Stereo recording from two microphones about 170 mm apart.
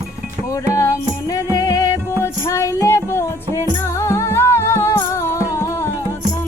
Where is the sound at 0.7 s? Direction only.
20° left (ahead or behind).